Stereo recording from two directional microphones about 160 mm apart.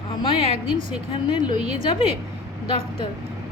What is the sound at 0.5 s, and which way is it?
Speech, 45° right (ahead or behind).